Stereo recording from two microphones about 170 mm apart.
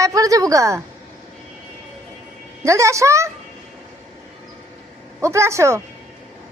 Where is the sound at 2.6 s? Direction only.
15° right (ahead or behind).